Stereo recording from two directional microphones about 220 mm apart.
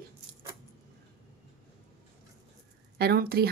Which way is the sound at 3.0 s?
45° right (ahead or behind).